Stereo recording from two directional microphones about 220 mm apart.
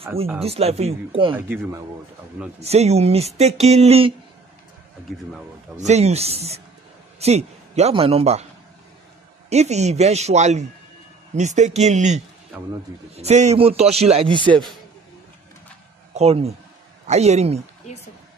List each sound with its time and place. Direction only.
0.4 s speech: 25° right (ahead or behind)
1.3 s speech: 10° right (ahead or behind)
2.6 s speech: 30° right (ahead or behind)
5.8 s speech: 30° right (ahead or behind)
9.5 s speech: 30° right (ahead or behind)
16.1 s speech: 30° right (ahead or behind)
17.9 s speech: 30° left (ahead or behind)